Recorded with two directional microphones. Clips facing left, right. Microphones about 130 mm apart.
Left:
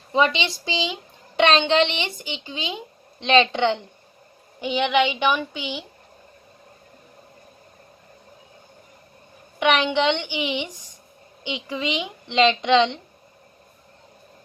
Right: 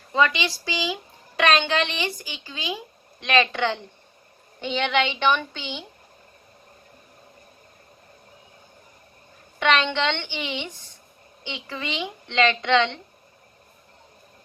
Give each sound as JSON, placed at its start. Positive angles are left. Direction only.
{"t": 0.1, "sound": "a woman's voice", "side_deg": 20}
{"t": 9.6, "sound": "a woman's voice", "side_deg": 15}